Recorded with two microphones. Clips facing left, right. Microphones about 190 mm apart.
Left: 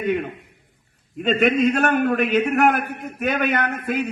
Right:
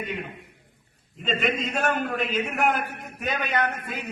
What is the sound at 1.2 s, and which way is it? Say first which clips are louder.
A man's voice: left 9 dB; 60° left (ahead or behind).